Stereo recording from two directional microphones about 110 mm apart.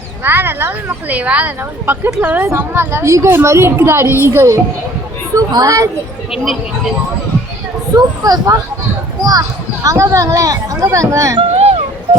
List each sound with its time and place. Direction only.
0.3 s a woman's voice: 20° right (ahead or behind)
5.3 s a woman's voice: 35° right (ahead or behind)
7.9 s a woman's voice: 35° right (ahead or behind)
9.8 s a woman's voice: 30° right (ahead or behind)
11.3 s a sound: 65° right (ahead or behind)